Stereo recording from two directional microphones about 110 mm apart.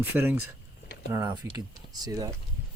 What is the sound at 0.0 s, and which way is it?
Speech, 20° right (ahead or behind).